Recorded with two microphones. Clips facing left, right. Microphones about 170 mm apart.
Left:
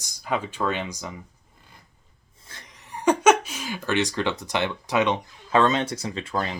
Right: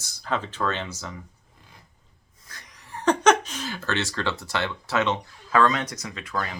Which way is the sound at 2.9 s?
10° left (ahead or behind).